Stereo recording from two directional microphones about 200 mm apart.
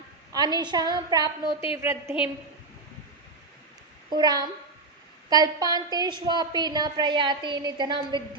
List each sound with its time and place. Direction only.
0.3 s a woman's voice: 20° right (ahead or behind)
1.5 s a woman's voice: 25° left (ahead or behind)
1.8 s a woman's voice: 15° right (ahead or behind)
4.1 s a woman's voice: 20° right (ahead or behind)